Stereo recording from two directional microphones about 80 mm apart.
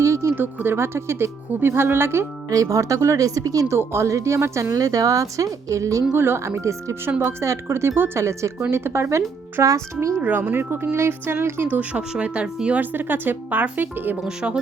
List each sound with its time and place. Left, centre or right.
0.0 s music: right
0.3 s speech: right
2.5 s speech: right
3.8 s a woman's voice: right
6.1 s a woman's voice: right
10.2 s speech: right
14.2 s speech: centre